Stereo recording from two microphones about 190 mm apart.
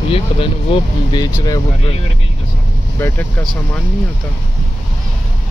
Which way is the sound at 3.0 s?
10° left (ahead or behind).